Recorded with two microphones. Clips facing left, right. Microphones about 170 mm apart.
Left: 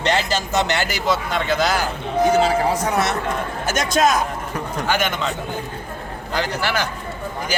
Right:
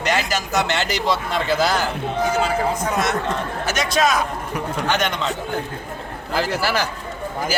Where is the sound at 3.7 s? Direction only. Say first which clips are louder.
Left 2 dB; 45° left (ahead or behind).